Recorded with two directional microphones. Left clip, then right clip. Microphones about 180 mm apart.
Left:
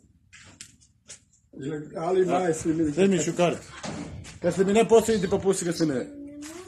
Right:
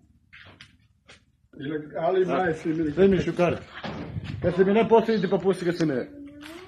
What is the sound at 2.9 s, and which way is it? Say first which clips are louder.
Speech: right 6 dB; centre (ahead or behind).